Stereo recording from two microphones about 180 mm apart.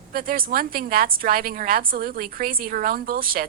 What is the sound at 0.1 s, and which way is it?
A woman's voice, 55° right (ahead or behind).